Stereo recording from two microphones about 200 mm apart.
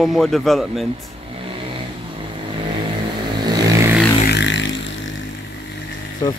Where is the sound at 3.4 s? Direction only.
15° right (ahead or behind).